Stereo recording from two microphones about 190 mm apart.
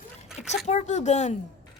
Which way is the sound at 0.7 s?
35° left (ahead or behind).